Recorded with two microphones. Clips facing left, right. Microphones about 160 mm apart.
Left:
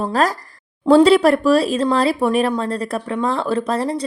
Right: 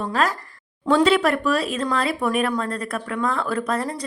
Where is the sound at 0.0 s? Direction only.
35° left (ahead or behind).